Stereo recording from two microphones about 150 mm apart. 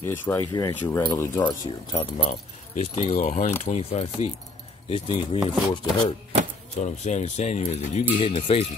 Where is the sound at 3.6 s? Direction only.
45° left (ahead or behind).